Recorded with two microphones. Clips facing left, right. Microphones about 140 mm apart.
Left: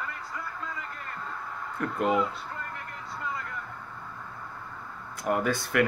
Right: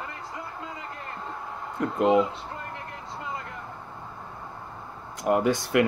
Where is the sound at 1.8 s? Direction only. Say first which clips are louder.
Right 5 dB; 20° right (ahead or behind).